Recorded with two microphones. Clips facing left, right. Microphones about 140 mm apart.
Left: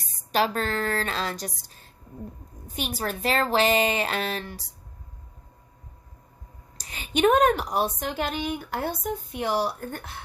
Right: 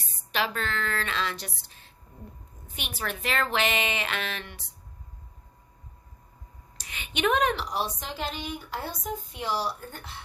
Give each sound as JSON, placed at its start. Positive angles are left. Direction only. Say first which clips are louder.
{"t": 0.3, "sound": "a woman's voice", "louder": "left 5 dB", "side_deg": 40}
{"t": 6.7, "sound": "a woman's voice", "louder": "left 7 dB", "side_deg": 35}